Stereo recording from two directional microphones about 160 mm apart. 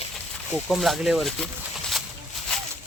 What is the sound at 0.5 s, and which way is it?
Speech, centre (ahead or behind).